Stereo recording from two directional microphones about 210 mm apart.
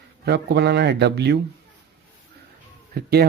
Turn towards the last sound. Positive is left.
turn(degrees=-50)  # may be behind; listen again after turning